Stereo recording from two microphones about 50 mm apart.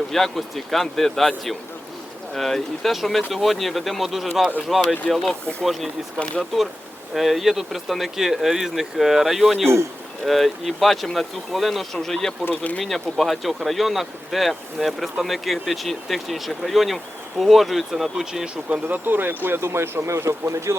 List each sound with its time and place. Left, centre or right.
0.1 s speech: centre
2.3 s speech: centre
6.5 s speech: centre
12.5 s speech: left
12.8 s speech: centre
18.9 s speech: right